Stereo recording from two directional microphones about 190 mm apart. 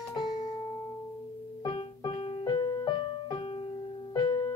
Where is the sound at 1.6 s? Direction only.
25° left (ahead or behind).